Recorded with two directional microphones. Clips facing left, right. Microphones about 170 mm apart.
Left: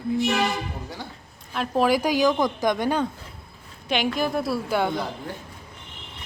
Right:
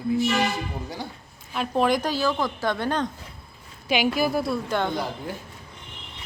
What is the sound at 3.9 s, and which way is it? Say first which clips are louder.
A woman's voice: right 1 dB; 5° right (ahead or behind).